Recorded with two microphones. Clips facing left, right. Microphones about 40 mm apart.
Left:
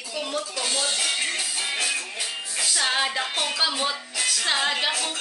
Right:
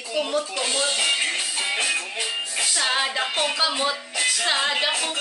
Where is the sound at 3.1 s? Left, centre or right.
Centre.